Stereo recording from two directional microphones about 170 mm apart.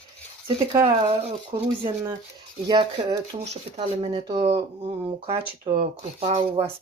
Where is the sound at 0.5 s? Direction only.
30° right (ahead or behind).